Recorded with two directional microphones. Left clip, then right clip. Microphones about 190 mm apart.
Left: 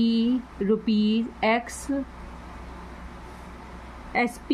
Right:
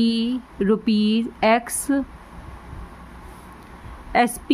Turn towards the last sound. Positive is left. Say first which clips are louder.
# right 7 dB
turn(degrees=-40)  # may be behind; listen again after turning